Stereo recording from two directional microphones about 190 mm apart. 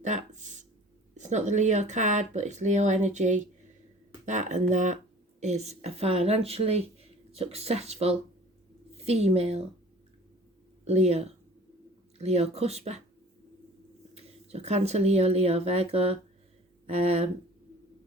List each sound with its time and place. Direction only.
0.0 s speech: 40° right (ahead or behind)
10.8 s speech: 35° right (ahead or behind)
14.1 s speech: 35° right (ahead or behind)